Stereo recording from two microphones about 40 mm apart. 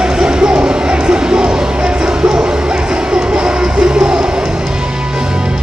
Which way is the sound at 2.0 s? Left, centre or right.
Centre.